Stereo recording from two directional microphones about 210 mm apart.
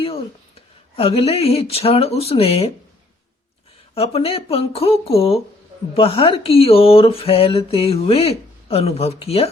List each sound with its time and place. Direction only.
0.0 s a sound: 25° left (ahead or behind)
0.9 s speech: 30° left (ahead or behind)
3.9 s speech: 30° left (ahead or behind)